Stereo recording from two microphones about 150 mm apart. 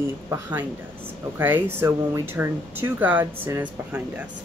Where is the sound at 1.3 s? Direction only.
15° right (ahead or behind).